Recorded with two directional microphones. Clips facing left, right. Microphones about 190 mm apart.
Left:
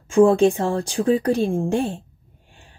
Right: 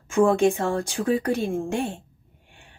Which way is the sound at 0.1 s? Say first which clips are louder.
Left 4 dB; 30° left (ahead or behind).